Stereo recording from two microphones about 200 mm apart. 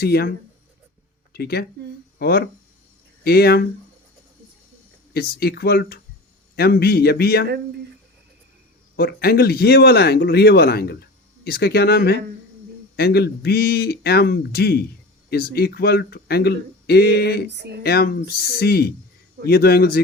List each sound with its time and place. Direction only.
0.0 s speech: 50° left (ahead or behind)
1.3 s speech: 50° left (ahead or behind)
5.1 s speech: 50° left (ahead or behind)
9.0 s speech: 50° left (ahead or behind)
17.6 s speech: 55° right (ahead or behind)
17.8 s speech: 50° left (ahead or behind)